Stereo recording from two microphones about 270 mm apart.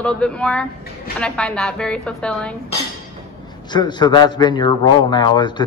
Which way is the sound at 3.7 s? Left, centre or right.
Centre.